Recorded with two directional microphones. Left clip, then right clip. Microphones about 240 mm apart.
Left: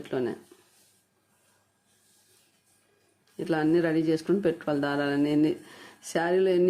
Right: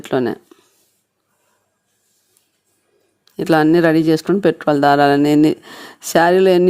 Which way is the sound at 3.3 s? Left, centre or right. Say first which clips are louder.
Right 12 dB; right.